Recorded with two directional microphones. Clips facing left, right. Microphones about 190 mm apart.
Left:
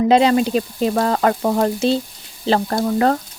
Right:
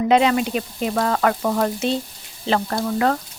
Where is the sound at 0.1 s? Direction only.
35° left (ahead or behind).